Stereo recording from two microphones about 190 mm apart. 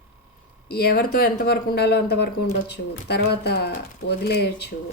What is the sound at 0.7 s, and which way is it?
Speech, 55° left (ahead or behind).